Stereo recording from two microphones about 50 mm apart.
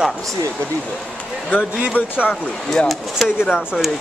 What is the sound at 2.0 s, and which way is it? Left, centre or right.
Speech, left.